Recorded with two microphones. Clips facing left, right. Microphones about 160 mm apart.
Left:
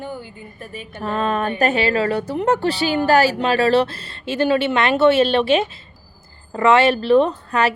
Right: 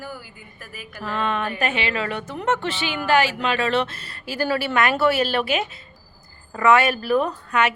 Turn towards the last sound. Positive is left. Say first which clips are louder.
# left 4 dB
turn(degrees=30)  # may be behind; listen again after turning